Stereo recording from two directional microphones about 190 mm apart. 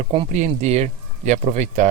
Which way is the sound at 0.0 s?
30° right (ahead or behind).